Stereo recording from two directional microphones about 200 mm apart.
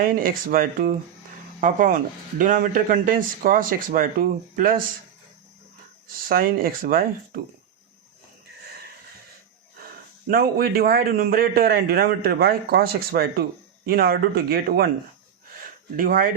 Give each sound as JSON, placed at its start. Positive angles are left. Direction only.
{"t": 0.0, "sound": "a man's voice", "side_deg": -45}
{"t": 6.2, "sound": "a man's voice", "side_deg": -45}
{"t": 10.2, "sound": "a man's voice", "side_deg": -50}
{"t": 16.0, "sound": "a man's voice", "side_deg": -45}